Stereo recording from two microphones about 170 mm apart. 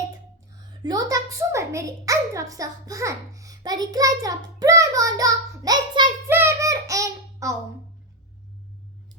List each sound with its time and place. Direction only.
0.8 s a woman's voice: 20° right (ahead or behind)
6.2 s child singing: 15° right (ahead or behind)